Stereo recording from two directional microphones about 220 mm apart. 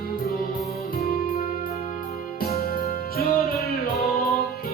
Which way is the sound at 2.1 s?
45° left (ahead or behind).